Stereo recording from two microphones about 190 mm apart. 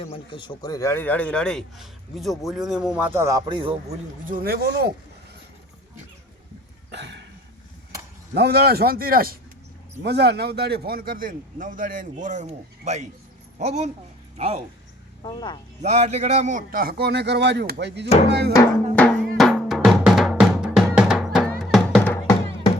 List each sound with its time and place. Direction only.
0.0 s a man's voice: 25° left (ahead or behind); by 3.9 s 30° right (ahead or behind)
4.3 s a man's voice: 50° right (ahead or behind)
6.9 s hiccup: 65° right (ahead or behind)
8.3 s a man's voice: 55° right (ahead or behind)
10.0 s a man's voice: 60° right (ahead or behind); by 14.6 s 35° right (ahead or behind)
15.2 s speech: 25° left (ahead or behind)
15.8 s a man's voice: 35° right (ahead or behind); by 18.5 s 60° right (ahead or behind)
18.5 s drum: 5° left (ahead or behind)
22.1 s music: 15° left (ahead or behind)